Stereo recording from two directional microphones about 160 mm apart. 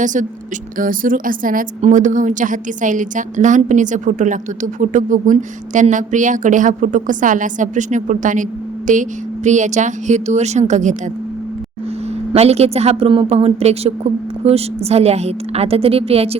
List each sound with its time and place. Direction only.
0.0 s a woman's voice: 55° right (ahead or behind)
12.3 s a woman's voice: 40° right (ahead or behind)